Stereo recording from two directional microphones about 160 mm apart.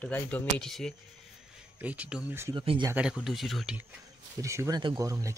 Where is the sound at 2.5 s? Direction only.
35° right (ahead or behind).